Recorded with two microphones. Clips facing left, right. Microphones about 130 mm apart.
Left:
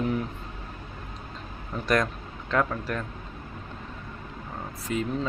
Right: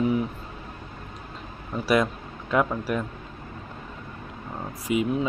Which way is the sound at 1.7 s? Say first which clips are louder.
Right 3 dB; 5° right (ahead or behind).